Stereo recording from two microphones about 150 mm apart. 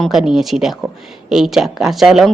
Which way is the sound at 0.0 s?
Centre (ahead or behind).